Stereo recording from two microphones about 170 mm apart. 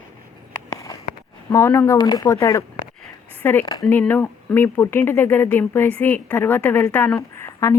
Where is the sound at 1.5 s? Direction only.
15° left (ahead or behind).